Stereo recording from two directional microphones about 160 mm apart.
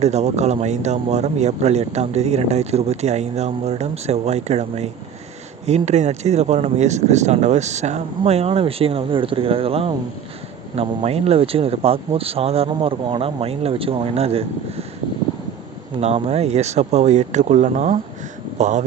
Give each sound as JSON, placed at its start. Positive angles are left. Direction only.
{"t": 0.0, "sound": "speech", "side_deg": -45}
{"t": 16.0, "sound": "speech", "side_deg": -40}